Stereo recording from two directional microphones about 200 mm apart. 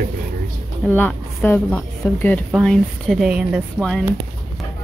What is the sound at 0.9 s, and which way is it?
Speech, 5° left (ahead or behind).